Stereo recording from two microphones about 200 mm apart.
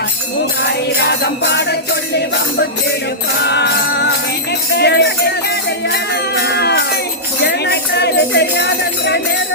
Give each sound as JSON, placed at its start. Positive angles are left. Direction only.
{"t": 0.9, "sound": "music", "side_deg": 55}